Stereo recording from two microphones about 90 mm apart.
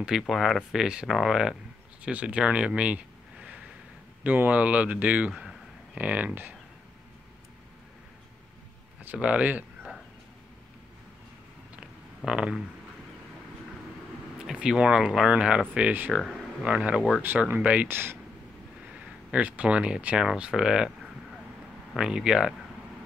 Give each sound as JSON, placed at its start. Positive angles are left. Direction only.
{"t": 0.0, "sound": "speech", "side_deg": 0}
{"t": 5.3, "sound": "a sound", "side_deg": 0}
{"t": 5.9, "sound": "speech", "side_deg": -15}
{"t": 9.0, "sound": "speech", "side_deg": -15}
{"t": 12.3, "sound": "speech", "side_deg": -10}
{"t": 14.4, "sound": "speech", "side_deg": -5}
{"t": 16.1, "sound": "speech", "side_deg": 0}
{"t": 16.6, "sound": "speech", "side_deg": -10}
{"t": 17.2, "sound": "speech", "side_deg": -20}
{"t": 19.3, "sound": "speech", "side_deg": -15}
{"t": 21.9, "sound": "speech", "side_deg": -5}